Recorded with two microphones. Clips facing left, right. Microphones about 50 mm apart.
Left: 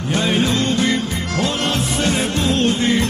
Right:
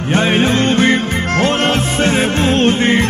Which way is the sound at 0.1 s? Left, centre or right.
Right.